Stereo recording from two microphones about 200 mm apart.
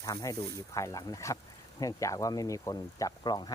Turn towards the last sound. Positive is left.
turn(degrees=20)  # may be behind; listen again after turning